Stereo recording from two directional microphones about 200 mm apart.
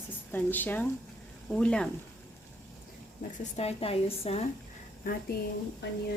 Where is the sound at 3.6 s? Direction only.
30° left (ahead or behind).